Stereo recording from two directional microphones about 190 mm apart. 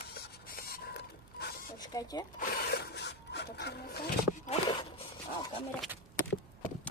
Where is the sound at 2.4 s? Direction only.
55° left (ahead or behind).